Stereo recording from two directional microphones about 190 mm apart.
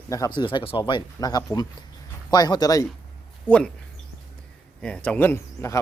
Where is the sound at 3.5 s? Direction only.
5° left (ahead or behind).